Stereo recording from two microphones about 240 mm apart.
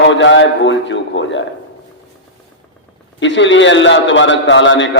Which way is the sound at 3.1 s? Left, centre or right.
Left.